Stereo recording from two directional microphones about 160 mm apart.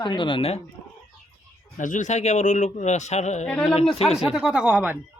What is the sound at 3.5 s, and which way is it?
Speech, 5° left (ahead or behind).